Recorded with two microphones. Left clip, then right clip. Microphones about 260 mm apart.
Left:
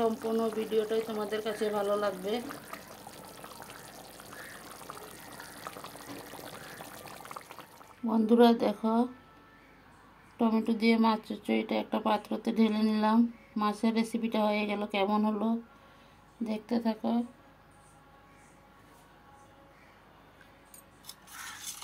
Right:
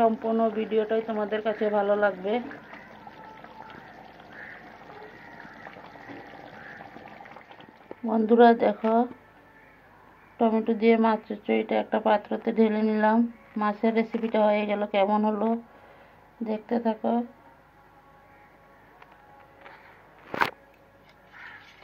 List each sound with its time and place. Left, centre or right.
0.0 s speech: centre
8.1 s speech: left
10.3 s speech: left